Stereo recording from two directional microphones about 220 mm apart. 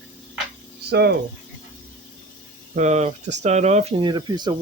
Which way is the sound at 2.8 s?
30° right (ahead or behind).